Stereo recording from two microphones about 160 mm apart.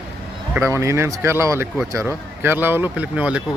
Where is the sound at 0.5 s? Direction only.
15° right (ahead or behind).